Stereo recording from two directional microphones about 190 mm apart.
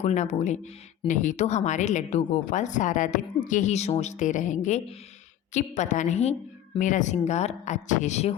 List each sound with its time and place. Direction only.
0.0 s speech: 35° left (ahead or behind)